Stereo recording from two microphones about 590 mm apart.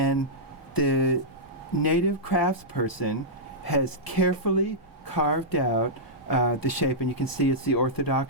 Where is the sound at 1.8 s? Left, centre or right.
Left.